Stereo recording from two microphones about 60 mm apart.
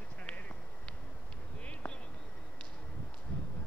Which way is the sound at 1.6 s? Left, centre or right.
Left.